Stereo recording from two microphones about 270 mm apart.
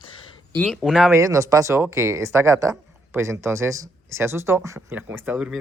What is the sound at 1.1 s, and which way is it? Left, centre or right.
Speech, centre.